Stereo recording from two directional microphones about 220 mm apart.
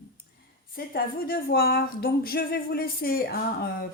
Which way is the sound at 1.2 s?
45° left (ahead or behind).